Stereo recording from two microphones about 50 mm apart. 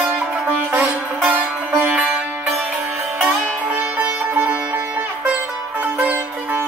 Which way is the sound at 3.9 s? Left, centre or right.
Right.